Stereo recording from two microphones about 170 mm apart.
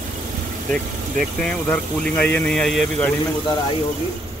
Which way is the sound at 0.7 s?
5° left (ahead or behind).